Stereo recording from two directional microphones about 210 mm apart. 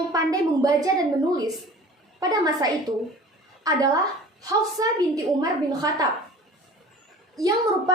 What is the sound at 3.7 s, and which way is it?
A woman's voice, 15° right (ahead or behind).